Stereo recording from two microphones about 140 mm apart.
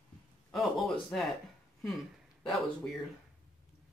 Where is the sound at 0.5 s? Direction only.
5° left (ahead or behind).